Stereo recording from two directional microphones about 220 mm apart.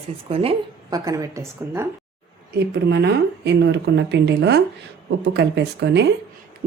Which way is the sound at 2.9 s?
50° right (ahead or behind).